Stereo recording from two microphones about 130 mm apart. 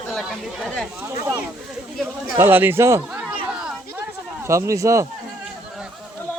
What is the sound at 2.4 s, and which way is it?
Speech, 15° right (ahead or behind).